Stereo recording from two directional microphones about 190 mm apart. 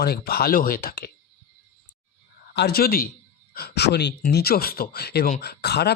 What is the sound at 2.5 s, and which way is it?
Speech, 55° left (ahead or behind).